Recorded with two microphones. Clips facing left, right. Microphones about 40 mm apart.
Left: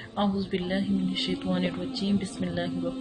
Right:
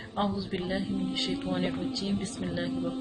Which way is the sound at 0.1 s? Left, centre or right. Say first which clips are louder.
Left 3 dB; centre.